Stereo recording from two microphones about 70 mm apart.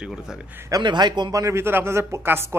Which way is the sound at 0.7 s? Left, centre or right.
Right.